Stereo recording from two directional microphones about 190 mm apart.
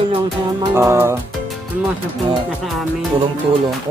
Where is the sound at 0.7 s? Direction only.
15° right (ahead or behind).